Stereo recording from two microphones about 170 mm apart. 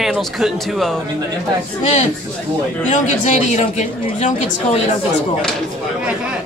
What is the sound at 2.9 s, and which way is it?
A man's voice, 45° left (ahead or behind).